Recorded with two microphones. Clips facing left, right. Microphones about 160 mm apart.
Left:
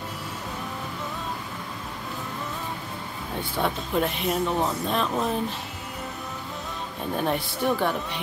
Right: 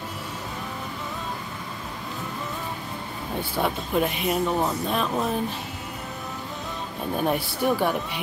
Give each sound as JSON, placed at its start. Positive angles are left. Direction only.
{"t": 3.5, "sound": "speech", "side_deg": -5}
{"t": 7.2, "sound": "speech", "side_deg": -5}